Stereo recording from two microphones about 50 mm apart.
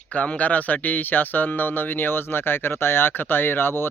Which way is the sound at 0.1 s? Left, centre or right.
Left.